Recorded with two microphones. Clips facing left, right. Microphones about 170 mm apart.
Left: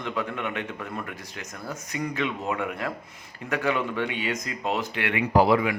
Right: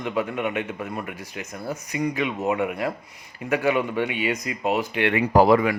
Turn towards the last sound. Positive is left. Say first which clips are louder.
# right 4 dB
turn(degrees=-45)  # may be behind; listen again after turning